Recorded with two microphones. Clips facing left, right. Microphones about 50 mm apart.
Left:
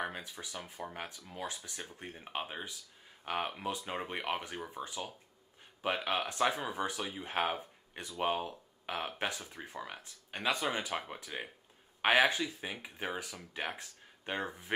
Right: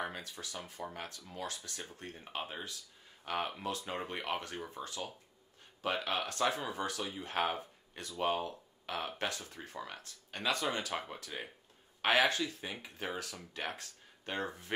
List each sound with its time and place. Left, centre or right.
0.0 s speech: centre